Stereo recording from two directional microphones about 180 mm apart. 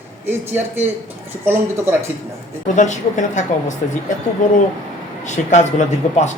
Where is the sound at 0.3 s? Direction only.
10° right (ahead or behind).